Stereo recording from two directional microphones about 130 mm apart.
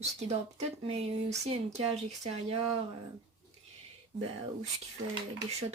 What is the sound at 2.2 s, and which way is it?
Speech, 55° right (ahead or behind).